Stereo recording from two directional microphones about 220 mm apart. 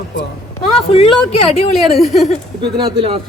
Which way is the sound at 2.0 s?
Centre (ahead or behind).